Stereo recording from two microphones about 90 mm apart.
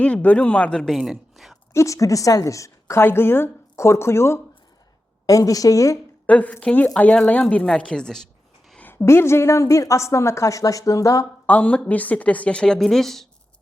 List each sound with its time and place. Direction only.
0.0 s a woman's voice: 15° left (ahead or behind)
0.9 s speech: 5° right (ahead or behind)
1.7 s a woman's voice: 35° left (ahead or behind)
5.2 s a woman's voice: 40° left (ahead or behind)
6.2 s a woman's voice: 15° left (ahead or behind)
8.8 s a woman's voice: 25° left (ahead or behind)
11.4 s a woman's voice: 15° left (ahead or behind)